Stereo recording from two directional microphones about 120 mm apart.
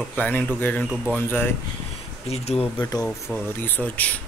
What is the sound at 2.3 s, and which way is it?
Speech, 60° left (ahead or behind).